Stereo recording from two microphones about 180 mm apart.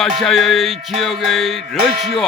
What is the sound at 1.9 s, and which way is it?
Music, 40° right (ahead or behind).